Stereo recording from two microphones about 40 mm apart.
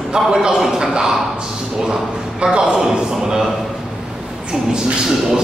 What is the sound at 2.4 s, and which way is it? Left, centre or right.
Speech, right.